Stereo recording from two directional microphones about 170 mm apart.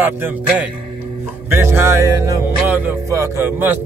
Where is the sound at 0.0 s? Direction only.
10° right (ahead or behind).